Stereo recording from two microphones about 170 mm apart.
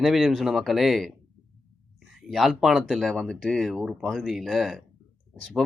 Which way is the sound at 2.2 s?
Centre (ahead or behind).